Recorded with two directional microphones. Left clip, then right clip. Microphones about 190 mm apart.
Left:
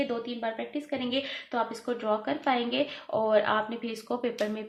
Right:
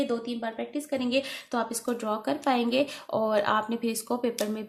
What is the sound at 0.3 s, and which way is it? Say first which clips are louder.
Speech: even; 35° right (ahead or behind).